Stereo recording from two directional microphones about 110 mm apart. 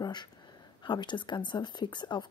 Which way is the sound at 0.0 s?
40° left (ahead or behind).